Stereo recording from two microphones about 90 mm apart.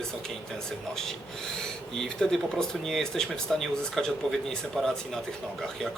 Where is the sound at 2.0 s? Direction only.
5° left (ahead or behind).